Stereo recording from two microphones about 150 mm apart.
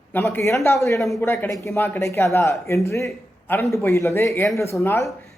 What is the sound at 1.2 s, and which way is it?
A man's voice, 15° left (ahead or behind).